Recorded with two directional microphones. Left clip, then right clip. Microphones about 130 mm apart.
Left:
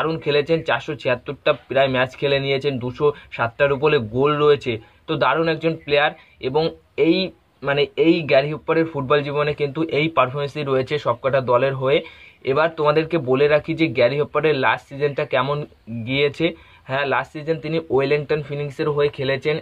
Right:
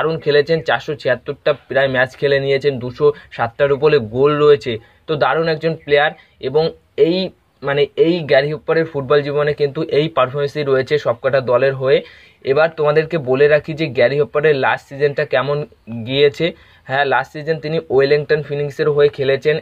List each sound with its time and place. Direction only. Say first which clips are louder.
0.0 s speech: right 5 dB; 25° right (ahead or behind)